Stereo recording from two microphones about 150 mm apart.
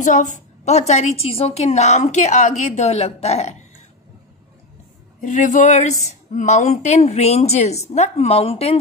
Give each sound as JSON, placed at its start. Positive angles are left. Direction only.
{"t": 0.0, "sound": "a woman's voice", "side_deg": 55}
{"t": 5.2, "sound": "a woman's voice", "side_deg": 60}